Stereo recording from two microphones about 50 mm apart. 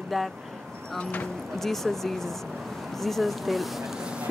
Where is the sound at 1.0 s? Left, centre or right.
Left.